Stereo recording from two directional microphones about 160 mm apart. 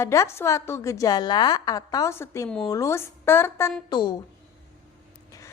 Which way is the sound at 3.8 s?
25° left (ahead or behind).